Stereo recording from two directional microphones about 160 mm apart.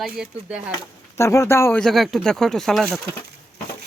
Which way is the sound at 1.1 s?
20° left (ahead or behind).